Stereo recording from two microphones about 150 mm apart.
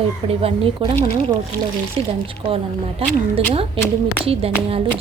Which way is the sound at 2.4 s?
40° right (ahead or behind).